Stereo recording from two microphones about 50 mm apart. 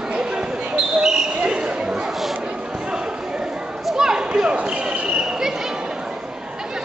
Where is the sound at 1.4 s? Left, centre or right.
Centre.